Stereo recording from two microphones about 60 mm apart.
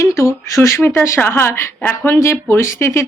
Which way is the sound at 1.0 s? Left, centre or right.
Left.